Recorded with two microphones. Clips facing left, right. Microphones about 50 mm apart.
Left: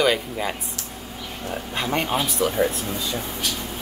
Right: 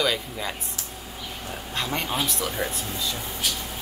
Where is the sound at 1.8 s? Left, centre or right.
Centre.